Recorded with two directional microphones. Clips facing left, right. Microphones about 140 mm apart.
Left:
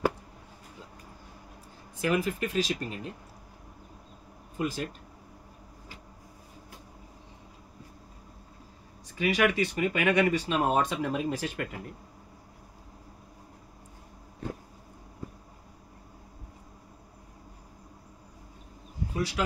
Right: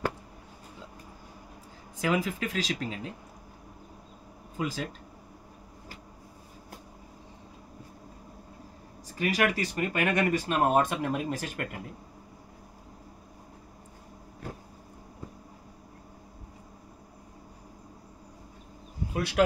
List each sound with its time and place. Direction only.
2.0 s speech: 90° right
4.6 s speech: 90° right
9.2 s speech: 40° right (ahead or behind)
19.1 s speech: 60° right (ahead or behind)